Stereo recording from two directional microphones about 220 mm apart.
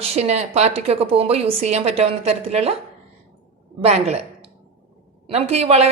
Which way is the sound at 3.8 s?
30° right (ahead or behind).